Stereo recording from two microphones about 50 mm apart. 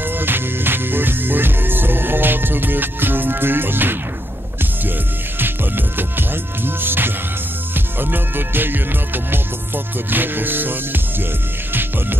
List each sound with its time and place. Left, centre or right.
0.0 s music: right
5.4 s music: right